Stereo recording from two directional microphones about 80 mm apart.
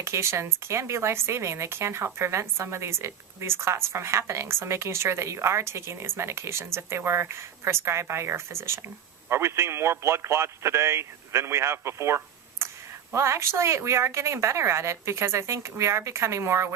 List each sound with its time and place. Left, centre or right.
0.0 s speech: right